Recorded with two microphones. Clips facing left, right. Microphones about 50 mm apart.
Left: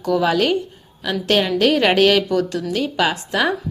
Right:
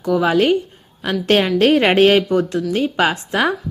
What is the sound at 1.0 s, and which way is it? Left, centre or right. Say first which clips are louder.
A woman's voice: right 2 dB; right.